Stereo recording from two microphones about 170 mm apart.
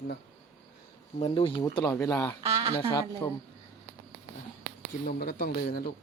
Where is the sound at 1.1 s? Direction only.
35° left (ahead or behind); by 3.3 s 15° left (ahead or behind).